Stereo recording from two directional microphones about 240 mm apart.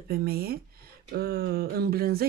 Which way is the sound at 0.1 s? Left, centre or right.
Right.